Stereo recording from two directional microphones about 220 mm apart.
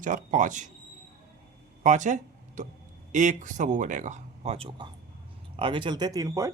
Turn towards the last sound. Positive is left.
turn(degrees=-15)  # may be behind; listen again after turning